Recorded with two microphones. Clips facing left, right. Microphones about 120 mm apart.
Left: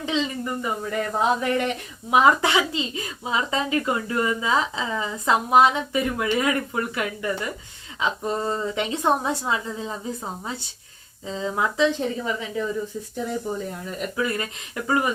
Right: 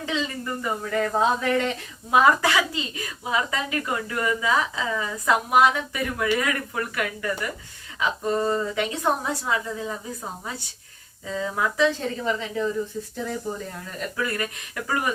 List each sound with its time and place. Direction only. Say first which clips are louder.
0.0 s speech: left 3 dB; 20° left (ahead or behind)
14.2 s speech: left 1 dB; 20° left (ahead or behind)